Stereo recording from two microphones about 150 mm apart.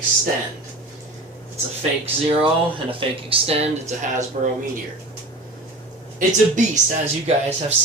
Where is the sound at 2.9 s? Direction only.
35° right (ahead or behind).